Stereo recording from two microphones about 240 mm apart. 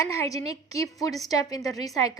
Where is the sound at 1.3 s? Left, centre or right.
Centre.